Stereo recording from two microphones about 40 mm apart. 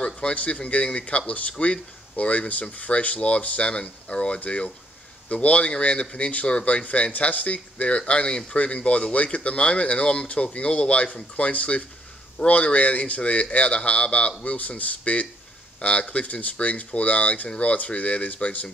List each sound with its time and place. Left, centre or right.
0.0 s speech: left
8.0 s speech: left
8.5 s speech: left